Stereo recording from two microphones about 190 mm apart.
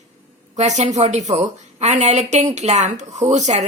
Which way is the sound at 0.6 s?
35° right (ahead or behind).